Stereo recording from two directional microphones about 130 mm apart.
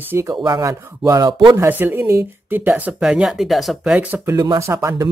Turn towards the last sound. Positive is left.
turn(degrees=-25)  # may be behind; listen again after turning